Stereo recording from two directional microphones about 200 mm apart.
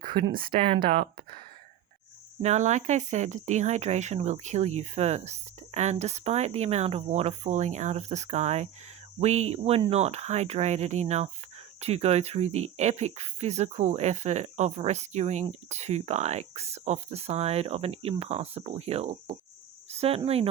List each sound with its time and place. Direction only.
0.3 s speech: 25° right (ahead or behind)
2.4 s speech: 35° right (ahead or behind)